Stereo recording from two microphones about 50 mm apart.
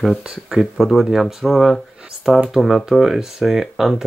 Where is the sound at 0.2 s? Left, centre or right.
Centre.